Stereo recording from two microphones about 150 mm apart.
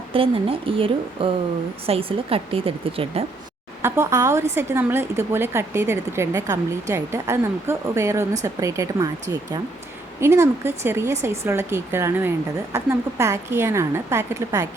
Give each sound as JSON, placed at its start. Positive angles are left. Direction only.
{"t": 0.1, "sound": "speech", "side_deg": -35}
{"t": 3.8, "sound": "speech", "side_deg": -20}